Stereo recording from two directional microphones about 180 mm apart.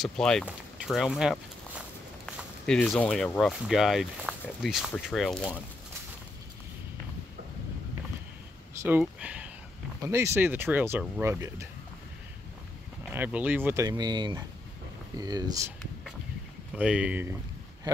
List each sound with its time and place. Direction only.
0.0 s speech: 5° left (ahead or behind)
2.6 s speech: 5° left (ahead or behind)
8.8 s speech: 10° right (ahead or behind)
13.1 s speech: 10° right (ahead or behind)
16.7 s speech: 5° right (ahead or behind)